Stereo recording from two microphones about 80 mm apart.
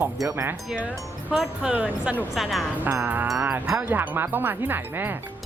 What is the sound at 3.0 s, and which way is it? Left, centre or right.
Speech, right.